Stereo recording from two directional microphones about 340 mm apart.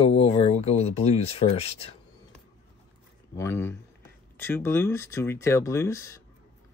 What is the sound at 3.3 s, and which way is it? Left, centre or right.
Speech, centre.